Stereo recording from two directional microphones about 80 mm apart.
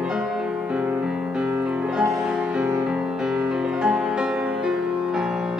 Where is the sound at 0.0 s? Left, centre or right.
Centre.